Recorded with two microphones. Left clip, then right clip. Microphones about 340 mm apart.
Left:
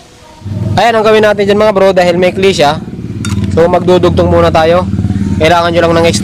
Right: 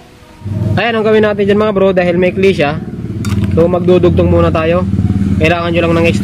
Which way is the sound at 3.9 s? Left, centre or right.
Left.